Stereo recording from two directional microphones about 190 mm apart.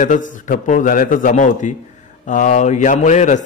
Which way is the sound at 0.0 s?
40° left (ahead or behind).